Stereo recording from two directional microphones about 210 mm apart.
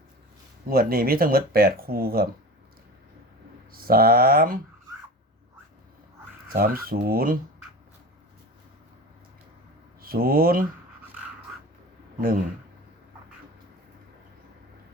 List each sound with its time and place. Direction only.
0.7 s speech: 45° right (ahead or behind)
3.7 s speech: 45° right (ahead or behind)
6.5 s speech: 45° right (ahead or behind)
10.0 s speech: 45° right (ahead or behind)